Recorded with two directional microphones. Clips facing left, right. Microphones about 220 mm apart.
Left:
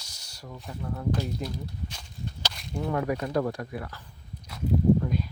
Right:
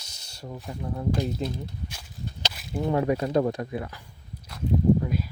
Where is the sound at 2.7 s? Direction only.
20° right (ahead or behind).